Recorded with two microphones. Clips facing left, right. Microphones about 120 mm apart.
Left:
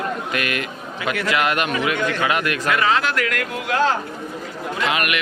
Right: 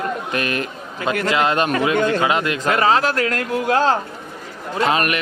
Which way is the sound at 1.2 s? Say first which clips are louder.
Right 3 dB; 25° right (ahead or behind).